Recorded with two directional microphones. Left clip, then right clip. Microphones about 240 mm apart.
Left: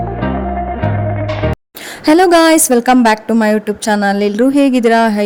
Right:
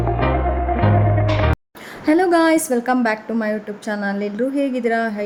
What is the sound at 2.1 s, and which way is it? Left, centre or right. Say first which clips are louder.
A woman's voice: left 7 dB; left.